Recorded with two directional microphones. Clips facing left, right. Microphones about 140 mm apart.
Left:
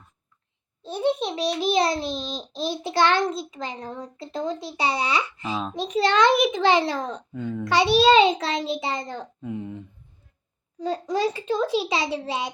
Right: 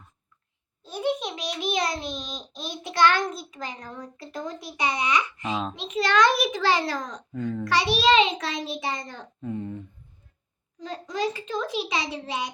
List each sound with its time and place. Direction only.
0.8 s a child's voice: 25° left (ahead or behind)
9.4 s speech: 10° left (ahead or behind)
10.8 s a child's voice: 35° left (ahead or behind)